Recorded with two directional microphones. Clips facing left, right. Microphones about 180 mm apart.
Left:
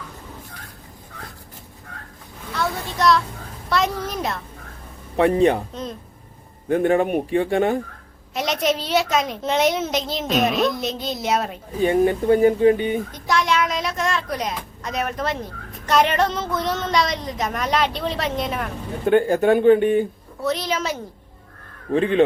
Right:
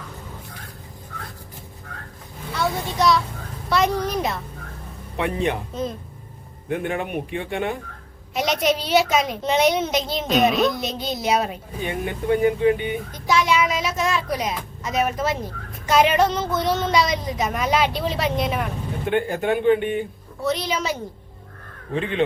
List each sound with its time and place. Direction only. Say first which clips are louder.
2.6 s a sound: right 1 dB; centre (ahead or behind)
3.7 s a woman's voice: right 2 dB; centre (ahead or behind)
5.1 s speech: left 7 dB; 40° left (ahead or behind)
6.7 s speech: left 8 dB; 40° left (ahead or behind)
8.3 s a woman's voice: right 1 dB; centre (ahead or behind)
11.8 s speech: left 10 dB; 35° left (ahead or behind)
13.2 s a woman's voice: right 2 dB; centre (ahead or behind)
19.0 s speech: left 6 dB; 40° left (ahead or behind)
20.4 s a woman's voice: even; centre (ahead or behind)
21.9 s speech: left 6 dB; 40° left (ahead or behind)